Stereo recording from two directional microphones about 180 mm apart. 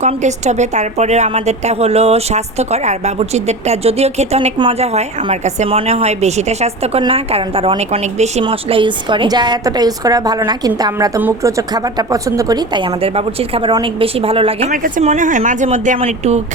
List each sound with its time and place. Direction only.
0.0 s a woman's voice: 40° right (ahead or behind)
14.7 s speech: 45° right (ahead or behind)